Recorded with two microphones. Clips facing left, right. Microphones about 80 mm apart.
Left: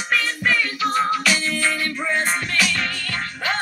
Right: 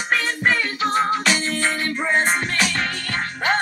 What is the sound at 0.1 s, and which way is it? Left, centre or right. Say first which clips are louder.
Music: right 1 dB; right.